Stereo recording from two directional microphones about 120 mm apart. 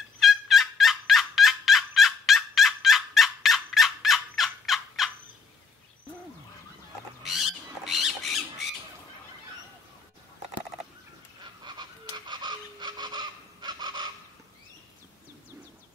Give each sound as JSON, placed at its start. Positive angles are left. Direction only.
{"t": 0.2, "sound": "fowl", "side_deg": 0}
{"t": 7.2, "sound": "a sound", "side_deg": 0}
{"t": 11.6, "sound": "goose", "side_deg": -40}